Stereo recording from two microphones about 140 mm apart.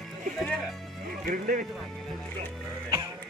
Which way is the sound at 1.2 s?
80° right.